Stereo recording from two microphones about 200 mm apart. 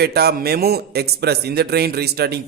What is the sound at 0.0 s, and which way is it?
A man's voice, 55° right (ahead or behind).